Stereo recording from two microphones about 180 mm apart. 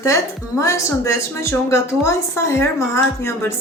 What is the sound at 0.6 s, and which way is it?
Speech, 15° left (ahead or behind).